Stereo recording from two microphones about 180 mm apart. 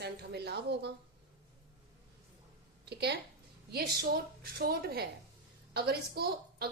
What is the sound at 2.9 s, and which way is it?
A woman's voice, 65° right (ahead or behind).